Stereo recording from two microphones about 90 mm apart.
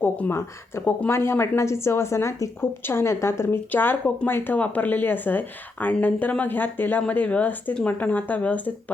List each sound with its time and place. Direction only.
0.0 s speech: 25° left (ahead or behind)